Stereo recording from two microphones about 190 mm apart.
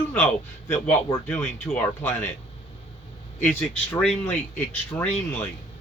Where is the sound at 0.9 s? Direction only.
10° left (ahead or behind).